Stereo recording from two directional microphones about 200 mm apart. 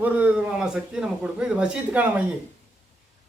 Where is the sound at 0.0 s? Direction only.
5° right (ahead or behind).